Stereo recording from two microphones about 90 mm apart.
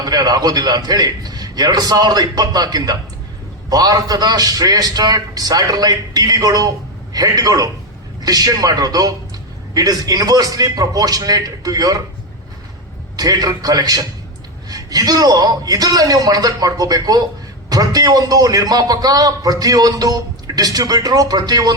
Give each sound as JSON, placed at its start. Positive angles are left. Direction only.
{"t": 0.0, "sound": "a man's voice", "side_deg": -45}
{"t": 13.1, "sound": "a man's voice", "side_deg": -45}